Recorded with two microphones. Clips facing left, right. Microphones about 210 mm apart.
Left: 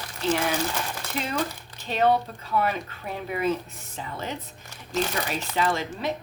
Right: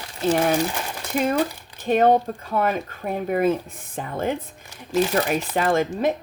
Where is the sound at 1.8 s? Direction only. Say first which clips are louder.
Right 5 dB; 50° right (ahead or behind).